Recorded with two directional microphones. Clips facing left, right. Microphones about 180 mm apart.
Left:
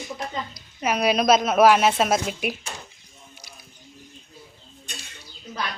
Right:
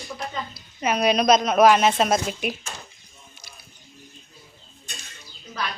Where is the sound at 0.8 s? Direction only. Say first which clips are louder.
Right 1 dB; 5° left (ahead or behind).